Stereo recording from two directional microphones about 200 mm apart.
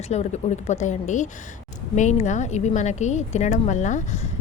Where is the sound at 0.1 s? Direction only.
35° left (ahead or behind).